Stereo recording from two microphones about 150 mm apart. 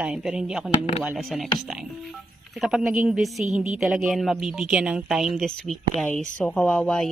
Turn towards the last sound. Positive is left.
turn(degrees=5)  # may be behind; listen again after turning